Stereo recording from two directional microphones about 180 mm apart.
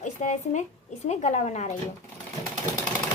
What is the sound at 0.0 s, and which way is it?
A woman's voice, 40° left (ahead or behind).